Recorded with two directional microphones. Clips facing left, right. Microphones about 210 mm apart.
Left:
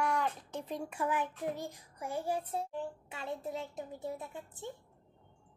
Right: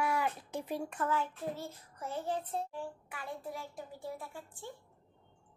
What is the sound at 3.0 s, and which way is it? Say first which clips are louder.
A child's voice: left 3 dB; 25° left (ahead or behind).